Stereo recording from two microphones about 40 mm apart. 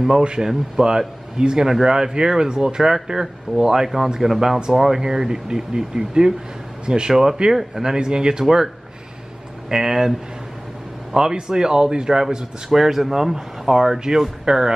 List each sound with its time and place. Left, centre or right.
0.2 s speech: right
9.7 s speech: centre
11.1 s speech: centre
12.6 s speech: centre